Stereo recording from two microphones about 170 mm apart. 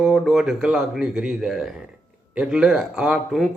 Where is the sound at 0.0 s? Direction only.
Centre (ahead or behind).